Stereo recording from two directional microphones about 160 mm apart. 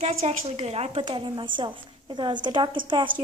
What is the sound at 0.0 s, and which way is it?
A woman's voice, 40° right (ahead or behind).